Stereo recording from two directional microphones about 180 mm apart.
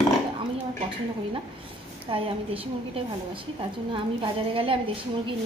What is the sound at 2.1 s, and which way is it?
A woman's voice, 30° right (ahead or behind).